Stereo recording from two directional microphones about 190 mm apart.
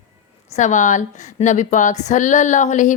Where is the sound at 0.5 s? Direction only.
40° left (ahead or behind).